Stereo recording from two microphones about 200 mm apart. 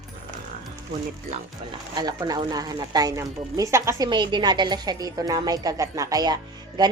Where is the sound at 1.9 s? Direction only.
20° right (ahead or behind).